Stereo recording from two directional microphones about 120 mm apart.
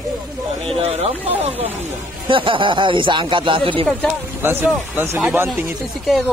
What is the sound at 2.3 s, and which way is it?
Speech, 45° right (ahead or behind).